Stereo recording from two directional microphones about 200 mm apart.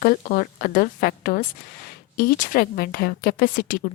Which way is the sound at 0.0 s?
45° left (ahead or behind).